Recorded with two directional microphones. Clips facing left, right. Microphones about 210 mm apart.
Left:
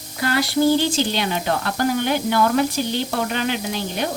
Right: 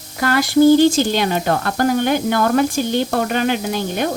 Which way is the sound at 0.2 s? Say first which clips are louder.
Right 6 dB; 50° right (ahead or behind).